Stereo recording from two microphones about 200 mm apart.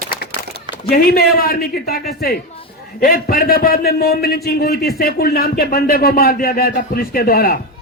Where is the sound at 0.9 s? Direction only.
50° left (ahead or behind).